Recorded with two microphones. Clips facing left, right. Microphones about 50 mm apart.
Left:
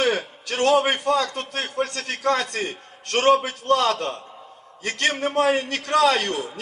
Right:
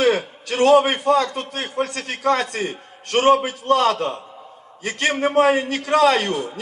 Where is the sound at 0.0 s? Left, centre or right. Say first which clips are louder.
Right 4 dB; right.